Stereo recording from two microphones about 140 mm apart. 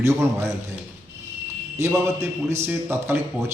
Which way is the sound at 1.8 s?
20° right (ahead or behind).